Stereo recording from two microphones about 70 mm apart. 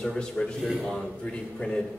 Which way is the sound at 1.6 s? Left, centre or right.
Centre.